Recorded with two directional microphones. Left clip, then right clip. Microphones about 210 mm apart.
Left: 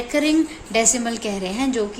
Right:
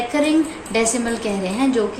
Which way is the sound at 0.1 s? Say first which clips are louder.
Left 1 dB; 50° left (ahead or behind).